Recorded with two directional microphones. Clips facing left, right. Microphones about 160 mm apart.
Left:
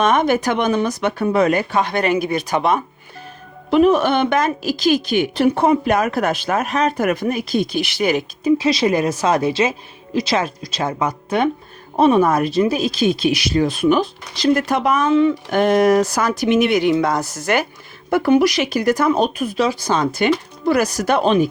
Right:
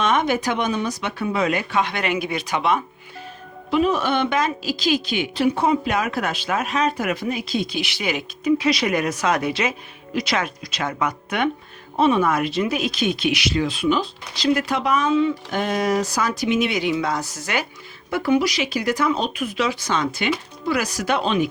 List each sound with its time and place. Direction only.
0.0 s speech: 45° left (ahead or behind)
3.7 s speech: 55° left (ahead or behind)
8.4 s speech: 30° left (ahead or behind)
11.9 s speech: 40° left (ahead or behind)